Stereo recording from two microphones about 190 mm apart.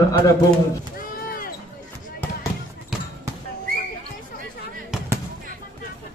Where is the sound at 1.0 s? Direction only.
50° left (ahead or behind).